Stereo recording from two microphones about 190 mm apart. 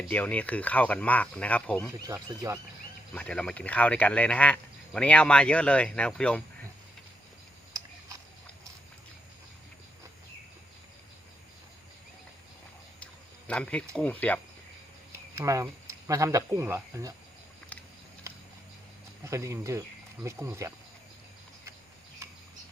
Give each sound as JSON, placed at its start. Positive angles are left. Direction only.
{"t": 0.1, "sound": "speech", "side_deg": 10}
{"t": 1.9, "sound": "speech", "side_deg": -15}
{"t": 3.2, "sound": "speech", "side_deg": 5}
{"t": 13.5, "sound": "speech", "side_deg": 5}
{"t": 15.4, "sound": "speech", "side_deg": -15}
{"t": 19.2, "sound": "speech", "side_deg": -15}